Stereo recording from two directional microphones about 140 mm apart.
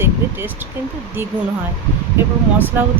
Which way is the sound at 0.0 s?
15° right (ahead or behind).